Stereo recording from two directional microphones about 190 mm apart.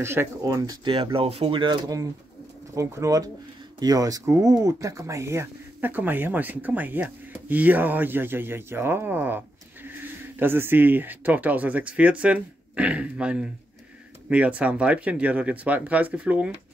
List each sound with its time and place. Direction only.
0.0 s speech: 15° right (ahead or behind)